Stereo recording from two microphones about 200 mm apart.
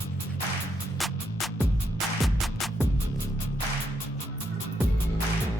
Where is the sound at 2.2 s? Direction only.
Centre (ahead or behind).